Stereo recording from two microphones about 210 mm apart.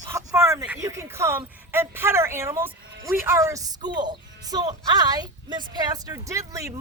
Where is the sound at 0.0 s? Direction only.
15° right (ahead or behind).